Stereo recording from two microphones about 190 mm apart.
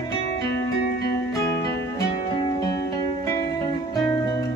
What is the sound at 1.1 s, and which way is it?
Music, 15° left (ahead or behind).